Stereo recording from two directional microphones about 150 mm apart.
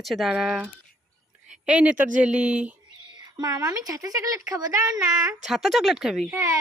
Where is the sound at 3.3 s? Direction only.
25° right (ahead or behind).